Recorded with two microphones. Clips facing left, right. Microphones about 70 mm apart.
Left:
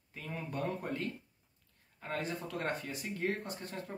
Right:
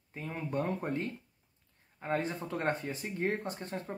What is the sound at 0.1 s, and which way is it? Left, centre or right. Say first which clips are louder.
Speech: right 5 dB; right.